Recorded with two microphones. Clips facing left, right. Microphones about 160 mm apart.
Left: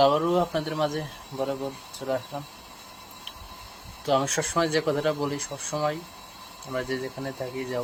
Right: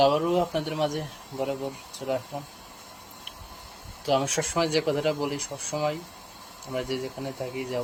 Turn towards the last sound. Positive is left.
turn(degrees=-10)  # may be behind; listen again after turning